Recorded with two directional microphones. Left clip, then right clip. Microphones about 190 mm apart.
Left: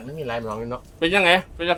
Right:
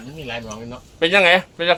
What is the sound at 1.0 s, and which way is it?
Speech, 15° right (ahead or behind).